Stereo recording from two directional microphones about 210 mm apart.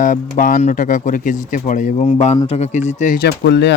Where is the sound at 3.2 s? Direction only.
55° left (ahead or behind).